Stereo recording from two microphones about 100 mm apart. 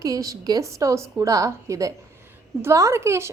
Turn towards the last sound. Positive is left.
turn(degrees=-30)  # may be behind; listen again after turning